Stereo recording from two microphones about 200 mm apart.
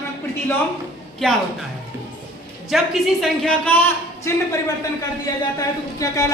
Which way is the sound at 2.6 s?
Centre (ahead or behind).